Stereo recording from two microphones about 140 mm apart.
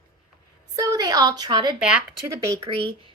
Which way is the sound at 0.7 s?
25° right (ahead or behind).